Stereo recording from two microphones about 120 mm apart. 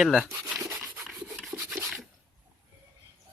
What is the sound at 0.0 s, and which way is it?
Speech, centre (ahead or behind).